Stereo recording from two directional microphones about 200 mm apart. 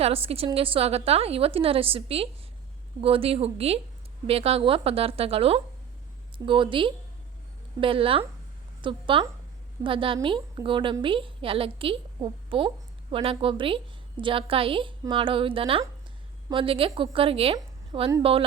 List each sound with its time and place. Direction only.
0.0 s a woman's voice: 30° right (ahead or behind)